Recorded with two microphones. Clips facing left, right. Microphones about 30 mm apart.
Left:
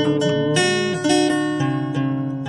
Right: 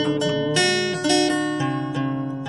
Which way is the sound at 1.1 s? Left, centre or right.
Right.